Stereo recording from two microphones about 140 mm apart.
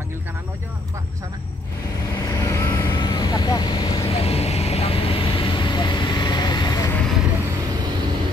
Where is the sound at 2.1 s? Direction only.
25° left (ahead or behind).